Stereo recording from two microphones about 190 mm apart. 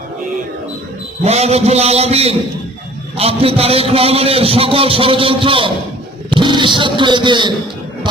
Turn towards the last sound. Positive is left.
turn(degrees=-25)  # may be behind; listen again after turning